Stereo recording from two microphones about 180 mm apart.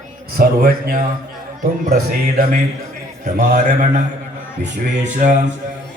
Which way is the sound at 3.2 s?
40° right (ahead or behind).